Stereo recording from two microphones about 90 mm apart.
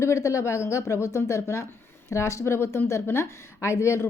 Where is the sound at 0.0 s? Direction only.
35° left (ahead or behind).